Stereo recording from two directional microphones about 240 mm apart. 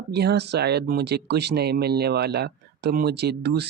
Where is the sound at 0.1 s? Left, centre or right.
Right.